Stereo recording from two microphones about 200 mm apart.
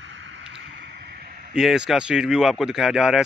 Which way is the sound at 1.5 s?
5° right (ahead or behind).